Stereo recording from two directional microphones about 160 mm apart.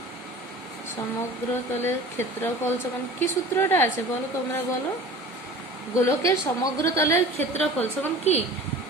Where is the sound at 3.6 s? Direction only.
15° left (ahead or behind).